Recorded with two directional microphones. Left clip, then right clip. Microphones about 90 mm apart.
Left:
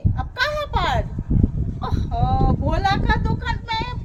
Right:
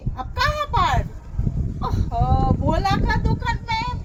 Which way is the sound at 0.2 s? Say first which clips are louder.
Right 1 dB; 45° left (ahead or behind).